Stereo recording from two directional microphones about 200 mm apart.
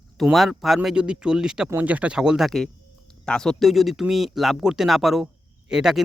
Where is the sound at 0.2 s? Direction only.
Centre (ahead or behind).